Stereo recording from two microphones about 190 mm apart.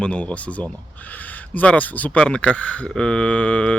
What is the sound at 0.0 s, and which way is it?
Speech, 5° left (ahead or behind).